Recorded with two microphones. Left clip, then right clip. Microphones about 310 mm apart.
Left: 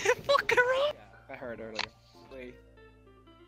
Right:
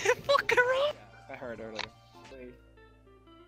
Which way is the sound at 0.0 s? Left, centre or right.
Centre.